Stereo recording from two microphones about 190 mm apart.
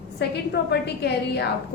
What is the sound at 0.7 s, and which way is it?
Speech, 60° left (ahead or behind).